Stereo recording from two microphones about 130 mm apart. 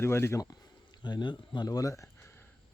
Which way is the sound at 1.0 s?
35° left (ahead or behind).